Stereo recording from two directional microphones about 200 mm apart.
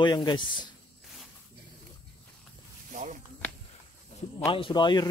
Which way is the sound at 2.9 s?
40° right (ahead or behind).